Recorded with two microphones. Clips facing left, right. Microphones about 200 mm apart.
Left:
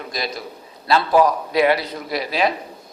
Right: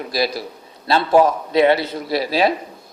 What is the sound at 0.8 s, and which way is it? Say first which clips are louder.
A man's voice: right 2 dB; 30° right (ahead or behind).